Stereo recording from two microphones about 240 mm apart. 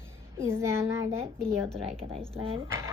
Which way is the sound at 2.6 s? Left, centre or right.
Centre.